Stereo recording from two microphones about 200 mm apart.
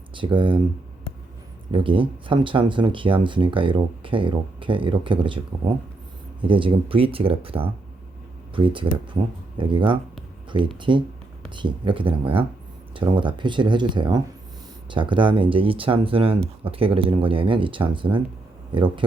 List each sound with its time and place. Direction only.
0.1 s speech: 25° right (ahead or behind)
1.7 s speech: 25° right (ahead or behind)
6.4 s speech: 25° right (ahead or behind)